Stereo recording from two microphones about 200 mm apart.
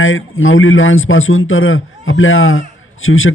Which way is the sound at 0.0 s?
85° left.